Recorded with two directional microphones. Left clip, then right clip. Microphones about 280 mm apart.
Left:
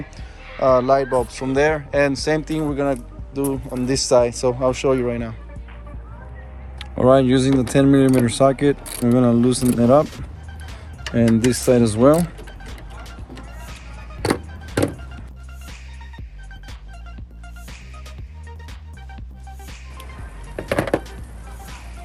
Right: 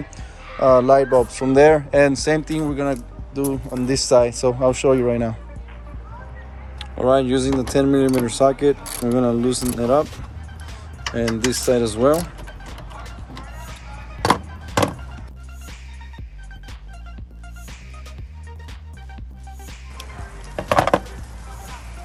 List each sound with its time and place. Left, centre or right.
0.7 s speech: centre
6.7 s speech: left
11.2 s speech: left
20.6 s music: centre